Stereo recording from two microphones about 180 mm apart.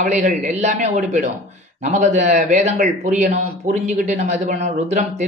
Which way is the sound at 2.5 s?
40° right (ahead or behind).